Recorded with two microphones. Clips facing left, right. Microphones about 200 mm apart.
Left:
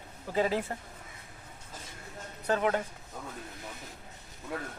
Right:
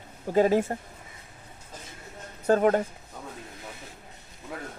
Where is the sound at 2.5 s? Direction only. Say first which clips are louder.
Right 7 dB; 45° right (ahead or behind).